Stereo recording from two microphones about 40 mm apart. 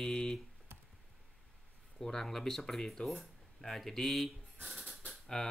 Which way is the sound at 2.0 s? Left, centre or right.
Centre.